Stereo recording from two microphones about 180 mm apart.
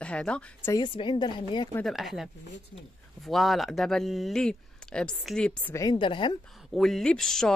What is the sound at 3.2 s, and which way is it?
Speech, centre (ahead or behind).